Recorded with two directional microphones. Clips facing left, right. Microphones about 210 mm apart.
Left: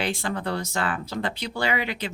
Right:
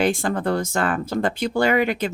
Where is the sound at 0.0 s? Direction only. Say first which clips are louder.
Right 7 dB; 50° right (ahead or behind).